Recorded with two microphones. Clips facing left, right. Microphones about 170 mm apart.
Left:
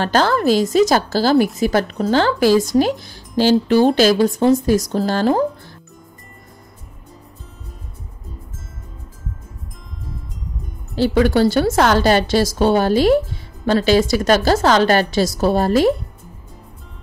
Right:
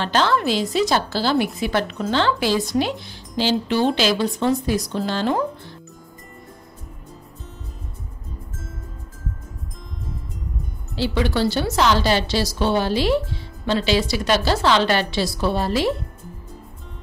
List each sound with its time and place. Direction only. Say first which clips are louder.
0.0 s a woman's voice: left 4 dB; 45° left (ahead or behind)
11.0 s a woman's voice: left 7 dB; 45° left (ahead or behind)